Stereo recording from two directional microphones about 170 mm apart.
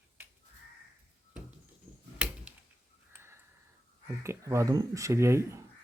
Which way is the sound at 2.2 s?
5° right (ahead or behind).